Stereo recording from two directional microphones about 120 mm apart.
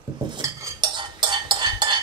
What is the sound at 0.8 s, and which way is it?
Cutlery, 40° right (ahead or behind).